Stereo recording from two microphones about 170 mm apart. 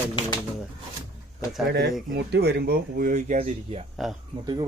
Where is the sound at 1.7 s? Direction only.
80° right; by 3.5 s 45° right (ahead or behind).